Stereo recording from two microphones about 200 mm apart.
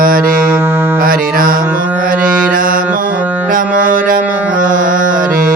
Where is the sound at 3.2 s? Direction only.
10° right (ahead or behind).